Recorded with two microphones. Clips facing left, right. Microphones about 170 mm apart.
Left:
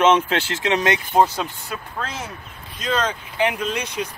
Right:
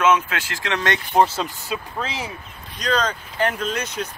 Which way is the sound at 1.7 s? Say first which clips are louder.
Right 2 dB; 10° right (ahead or behind).